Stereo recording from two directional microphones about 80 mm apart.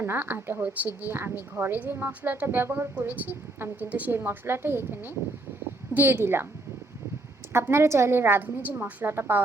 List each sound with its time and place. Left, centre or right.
0.0 s speech: right
7.5 s speech: right